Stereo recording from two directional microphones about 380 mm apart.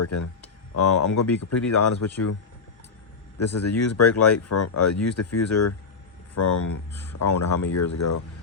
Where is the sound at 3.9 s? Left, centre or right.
Left.